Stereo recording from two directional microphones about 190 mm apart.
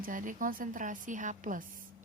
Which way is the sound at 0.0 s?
45° right (ahead or behind).